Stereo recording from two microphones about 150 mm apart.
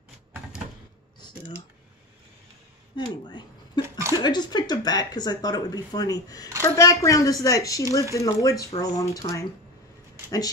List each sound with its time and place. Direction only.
1.2 s computer keyboard: 40° left (ahead or behind)
3.3 s a sound: 30° left (ahead or behind)
4.1 s speech: 30° left (ahead or behind)